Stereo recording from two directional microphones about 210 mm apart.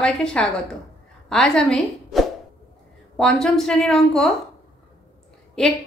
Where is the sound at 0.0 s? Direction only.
5° left (ahead or behind).